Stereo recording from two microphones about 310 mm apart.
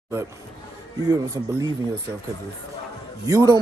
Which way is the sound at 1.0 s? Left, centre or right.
Centre.